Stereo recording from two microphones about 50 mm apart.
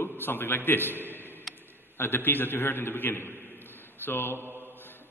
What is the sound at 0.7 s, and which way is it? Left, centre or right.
Speech, left.